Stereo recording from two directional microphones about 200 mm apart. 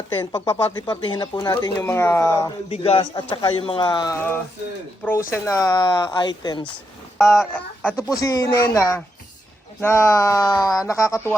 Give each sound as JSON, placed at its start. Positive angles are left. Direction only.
{"t": 0.2, "sound": "speech", "side_deg": 20}
{"t": 2.6, "sound": "speech", "side_deg": 30}
{"t": 7.2, "sound": "speech", "side_deg": 0}